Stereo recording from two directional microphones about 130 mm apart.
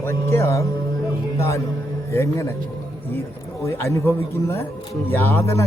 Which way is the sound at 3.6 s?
25° left (ahead or behind).